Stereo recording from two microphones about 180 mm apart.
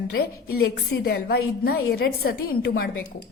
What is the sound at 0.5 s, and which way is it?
A woman's voice, 60° left (ahead or behind).